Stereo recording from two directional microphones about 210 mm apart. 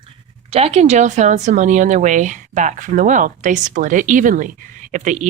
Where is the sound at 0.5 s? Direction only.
30° right (ahead or behind).